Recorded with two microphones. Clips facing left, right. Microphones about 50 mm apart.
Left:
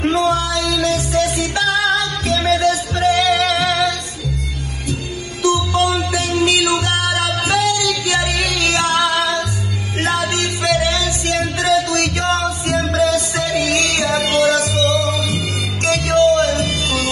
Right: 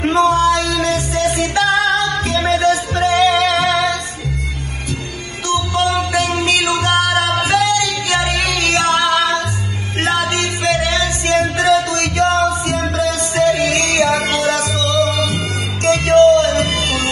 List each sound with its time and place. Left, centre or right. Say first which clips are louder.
0.0 s music: right 4 dB; right
5.4 s music: left 1 dB; right